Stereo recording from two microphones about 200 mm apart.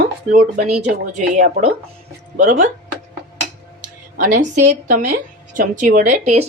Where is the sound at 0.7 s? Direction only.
35° right (ahead or behind).